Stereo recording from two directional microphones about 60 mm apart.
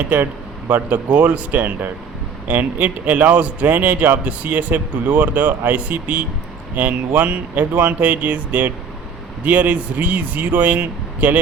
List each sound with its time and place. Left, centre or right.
0.1 s speech: right